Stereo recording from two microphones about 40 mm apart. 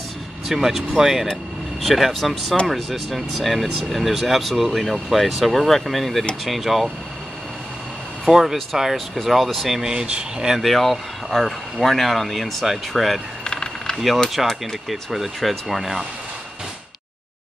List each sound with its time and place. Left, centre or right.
0.5 s speech: centre
8.3 s speech: centre
9.8 s speech: centre
10.6 s speech: centre
13.4 s vehicle: centre
13.9 s speech: centre